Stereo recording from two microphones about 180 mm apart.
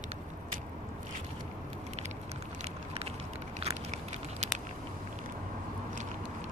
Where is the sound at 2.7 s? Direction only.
35° right (ahead or behind).